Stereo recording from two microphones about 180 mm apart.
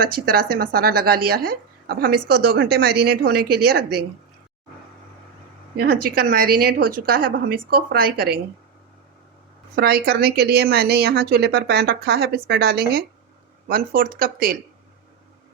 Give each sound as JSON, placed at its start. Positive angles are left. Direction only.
{"t": 0.0, "sound": "speech", "side_deg": -55}
{"t": 5.7, "sound": "speech", "side_deg": -60}
{"t": 9.7, "sound": "speech", "side_deg": -60}